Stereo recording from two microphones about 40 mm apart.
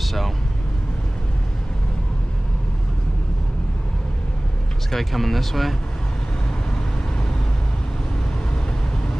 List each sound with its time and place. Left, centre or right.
0.0 s speech: centre
4.9 s speech: centre